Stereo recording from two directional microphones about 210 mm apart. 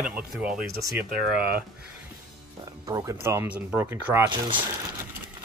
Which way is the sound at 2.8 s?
15° right (ahead or behind).